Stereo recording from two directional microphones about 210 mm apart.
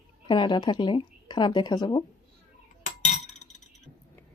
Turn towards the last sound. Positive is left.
turn(degrees=35)  # may be behind; listen again after turning